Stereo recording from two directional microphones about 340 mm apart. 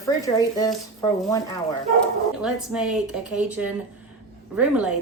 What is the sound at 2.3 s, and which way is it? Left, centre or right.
Speech, centre.